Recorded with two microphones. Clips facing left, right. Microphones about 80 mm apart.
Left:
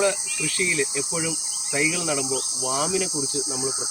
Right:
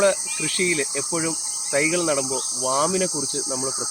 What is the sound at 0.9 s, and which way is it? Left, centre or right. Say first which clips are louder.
Cricket: right 2 dB; right.